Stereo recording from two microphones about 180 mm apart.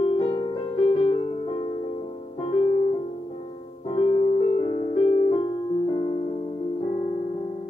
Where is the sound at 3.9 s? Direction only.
30° left (ahead or behind).